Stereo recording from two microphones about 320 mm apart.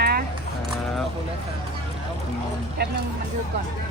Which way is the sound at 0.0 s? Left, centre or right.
Right.